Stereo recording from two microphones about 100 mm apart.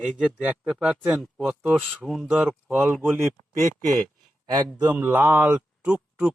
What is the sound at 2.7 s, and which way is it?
Speech, 15° right (ahead or behind).